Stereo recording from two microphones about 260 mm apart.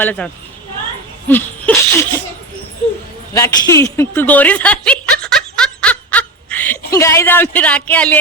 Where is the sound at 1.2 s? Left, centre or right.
Centre.